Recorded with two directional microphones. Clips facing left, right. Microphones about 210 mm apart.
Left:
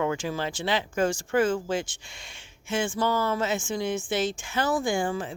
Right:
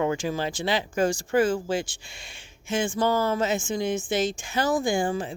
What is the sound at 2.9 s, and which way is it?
Speech, 45° right (ahead or behind).